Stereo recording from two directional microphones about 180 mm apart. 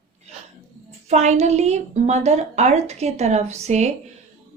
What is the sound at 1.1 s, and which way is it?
Speech, 40° right (ahead or behind).